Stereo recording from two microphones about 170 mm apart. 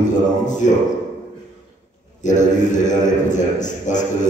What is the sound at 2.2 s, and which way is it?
A man's voice, 45° left (ahead or behind).